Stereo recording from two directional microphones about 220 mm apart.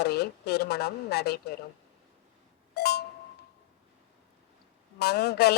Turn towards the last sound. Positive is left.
turn(degrees=45)  # may be behind; listen again after turning